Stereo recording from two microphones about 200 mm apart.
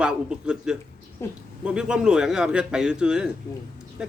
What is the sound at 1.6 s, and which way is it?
A man's voice, 5° right (ahead or behind).